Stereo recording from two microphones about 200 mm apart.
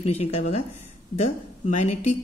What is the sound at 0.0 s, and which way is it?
A woman's voice, 30° left (ahead or behind).